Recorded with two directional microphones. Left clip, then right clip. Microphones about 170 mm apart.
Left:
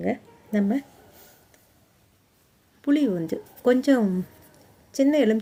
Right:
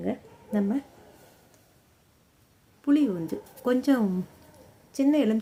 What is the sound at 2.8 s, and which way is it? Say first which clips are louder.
Speech: left 1 dB; 25° left (ahead or behind).